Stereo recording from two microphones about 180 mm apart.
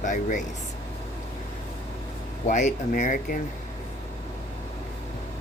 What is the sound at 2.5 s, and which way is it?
Speech, 40° left (ahead or behind).